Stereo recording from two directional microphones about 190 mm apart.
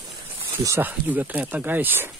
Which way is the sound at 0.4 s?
10° right (ahead or behind).